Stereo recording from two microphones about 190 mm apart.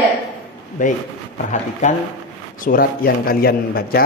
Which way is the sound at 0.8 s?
45° left (ahead or behind).